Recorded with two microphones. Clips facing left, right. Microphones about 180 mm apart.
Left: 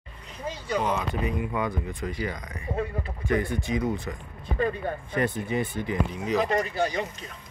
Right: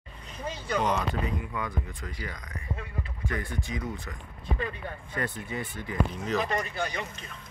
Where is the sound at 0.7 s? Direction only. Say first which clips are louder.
Left 1 dB; 5° left (ahead or behind).